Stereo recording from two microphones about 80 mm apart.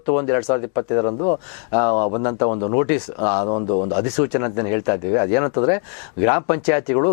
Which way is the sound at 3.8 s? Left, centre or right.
Centre.